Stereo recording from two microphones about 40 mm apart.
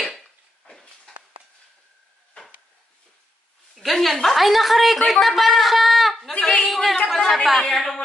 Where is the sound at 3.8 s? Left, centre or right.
Centre.